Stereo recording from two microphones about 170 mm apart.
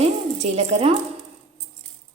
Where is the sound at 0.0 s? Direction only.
40° right (ahead or behind).